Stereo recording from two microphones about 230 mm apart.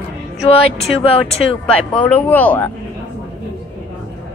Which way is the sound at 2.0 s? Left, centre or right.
Centre.